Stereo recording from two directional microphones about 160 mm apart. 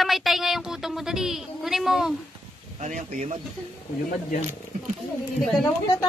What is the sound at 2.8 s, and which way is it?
Speech, 50° right (ahead or behind).